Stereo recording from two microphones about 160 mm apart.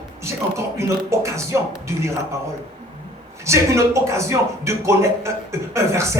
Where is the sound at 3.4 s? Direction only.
15° right (ahead or behind).